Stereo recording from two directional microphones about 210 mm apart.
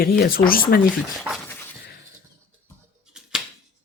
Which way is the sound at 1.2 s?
Centre (ahead or behind).